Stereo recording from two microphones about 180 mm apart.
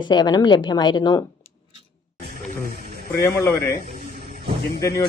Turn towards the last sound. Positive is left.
turn(degrees=20)  # may be behind; listen again after turning